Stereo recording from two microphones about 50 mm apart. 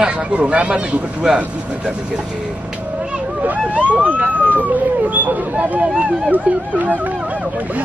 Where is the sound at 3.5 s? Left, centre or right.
Right.